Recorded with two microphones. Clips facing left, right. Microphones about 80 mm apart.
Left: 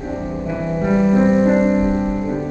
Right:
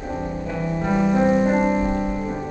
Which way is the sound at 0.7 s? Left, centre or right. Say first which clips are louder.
Left 4 dB; centre.